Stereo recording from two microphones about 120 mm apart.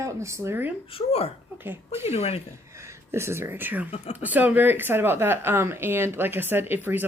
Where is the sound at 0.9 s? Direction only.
55° left (ahead or behind).